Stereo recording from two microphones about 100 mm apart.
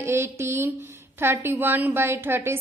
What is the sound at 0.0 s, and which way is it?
A woman's voice, 25° right (ahead or behind).